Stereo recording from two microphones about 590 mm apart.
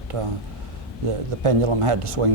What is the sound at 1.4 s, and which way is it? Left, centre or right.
Speech, right.